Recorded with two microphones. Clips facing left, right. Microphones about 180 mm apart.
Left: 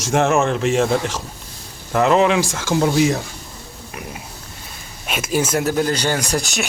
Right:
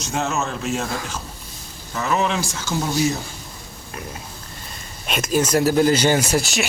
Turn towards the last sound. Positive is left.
turn(degrees=0)  # may be behind; listen again after turning